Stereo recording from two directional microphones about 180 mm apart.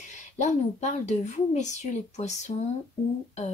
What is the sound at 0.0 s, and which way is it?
Speech, 40° left (ahead or behind).